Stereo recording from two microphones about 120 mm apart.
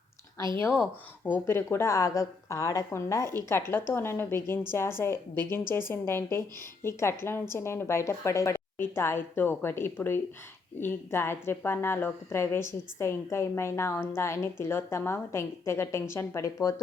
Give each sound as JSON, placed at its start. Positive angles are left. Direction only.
{"t": 0.8, "sound": "a woman's voice", "side_deg": 15}